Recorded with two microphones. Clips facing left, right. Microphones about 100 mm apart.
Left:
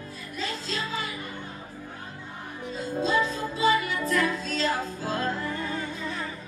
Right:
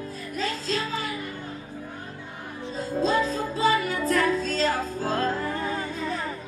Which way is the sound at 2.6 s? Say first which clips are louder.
Right 3 dB; 35° right (ahead or behind).